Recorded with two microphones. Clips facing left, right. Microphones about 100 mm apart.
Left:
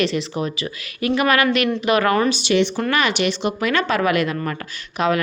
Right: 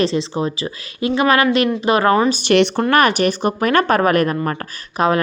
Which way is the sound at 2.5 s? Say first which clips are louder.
Right 4 dB; 65° right (ahead or behind).